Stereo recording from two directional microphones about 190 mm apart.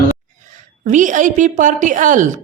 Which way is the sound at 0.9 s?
40° right (ahead or behind).